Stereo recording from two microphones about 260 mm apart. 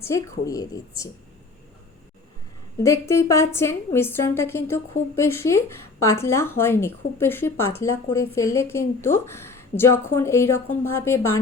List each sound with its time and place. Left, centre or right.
0.0 s speech: centre
2.8 s speech: centre